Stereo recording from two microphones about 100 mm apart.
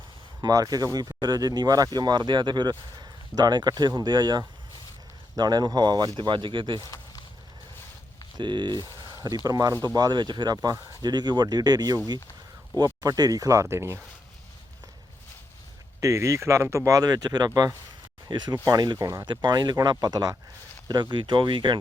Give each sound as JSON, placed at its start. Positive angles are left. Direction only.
{"t": 0.4, "sound": "speech", "side_deg": -35}
{"t": 6.7, "sound": "speech", "side_deg": 30}
{"t": 8.4, "sound": "speech", "side_deg": -50}
{"t": 16.0, "sound": "speech", "side_deg": -30}
{"t": 19.2, "sound": "speech", "side_deg": -45}